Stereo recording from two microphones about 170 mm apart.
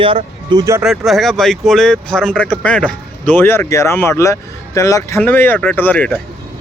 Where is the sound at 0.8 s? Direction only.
Centre (ahead or behind).